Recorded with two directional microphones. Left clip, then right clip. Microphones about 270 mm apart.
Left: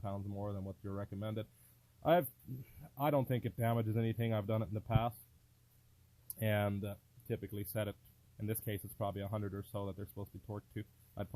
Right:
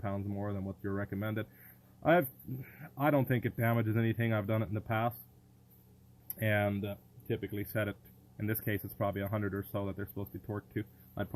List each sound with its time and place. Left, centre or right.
0.0 s speech: centre
6.4 s speech: left